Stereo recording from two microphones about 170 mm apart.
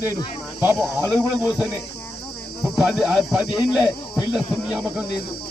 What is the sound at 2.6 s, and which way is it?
Speech, centre (ahead or behind).